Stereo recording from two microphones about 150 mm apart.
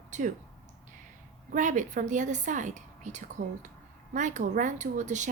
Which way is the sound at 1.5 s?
55° right (ahead or behind).